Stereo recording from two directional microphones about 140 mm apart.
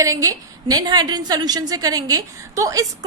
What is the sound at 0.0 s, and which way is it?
A woman's voice, 25° right (ahead or behind).